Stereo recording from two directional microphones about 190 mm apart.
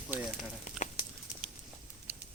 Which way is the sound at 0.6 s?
40° left (ahead or behind).